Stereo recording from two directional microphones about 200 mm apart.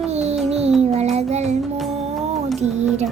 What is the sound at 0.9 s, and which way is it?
Child singing, 30° right (ahead or behind).